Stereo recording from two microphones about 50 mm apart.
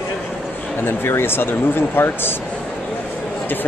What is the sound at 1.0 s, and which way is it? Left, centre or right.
Speech, left.